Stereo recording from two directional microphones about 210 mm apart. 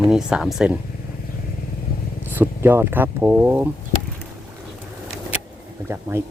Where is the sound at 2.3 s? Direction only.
10° right (ahead or behind).